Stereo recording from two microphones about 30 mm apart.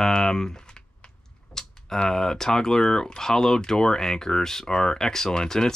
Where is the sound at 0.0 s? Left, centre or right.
Left.